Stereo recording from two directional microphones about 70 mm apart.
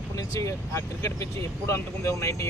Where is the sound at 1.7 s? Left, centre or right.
Left.